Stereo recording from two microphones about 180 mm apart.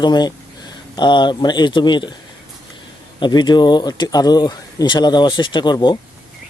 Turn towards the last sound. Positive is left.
turn(degrees=25)  # may be behind; listen again after turning